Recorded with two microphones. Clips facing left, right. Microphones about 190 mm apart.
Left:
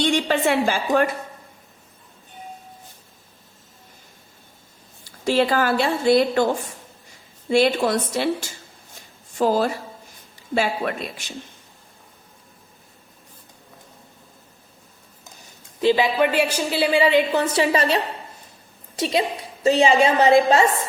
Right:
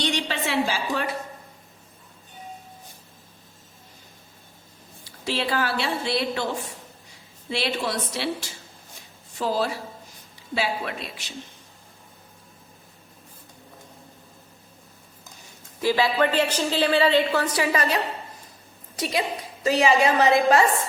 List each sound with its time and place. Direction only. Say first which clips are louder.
0.0 s a sound: left 7 dB; 50° left (ahead or behind)
5.0 s a woman's voice: left 8 dB; 50° left (ahead or behind)
7.5 s a woman's voice: left 9 dB; 50° left (ahead or behind)
15.8 s a woman's voice: left 3 dB; 20° left (ahead or behind)
19.6 s a woman's voice: left 3 dB; 25° left (ahead or behind)